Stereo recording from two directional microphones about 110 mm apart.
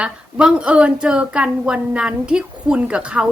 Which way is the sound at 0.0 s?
10° right (ahead or behind).